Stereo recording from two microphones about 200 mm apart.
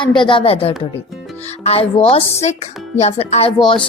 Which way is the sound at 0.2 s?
25° left (ahead or behind).